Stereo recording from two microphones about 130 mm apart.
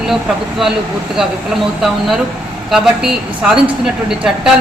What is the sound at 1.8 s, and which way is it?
Speech, centre (ahead or behind).